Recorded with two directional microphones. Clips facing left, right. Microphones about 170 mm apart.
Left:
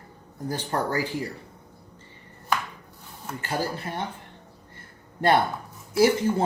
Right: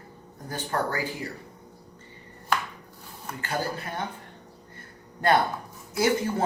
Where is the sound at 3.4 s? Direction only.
25° left (ahead or behind).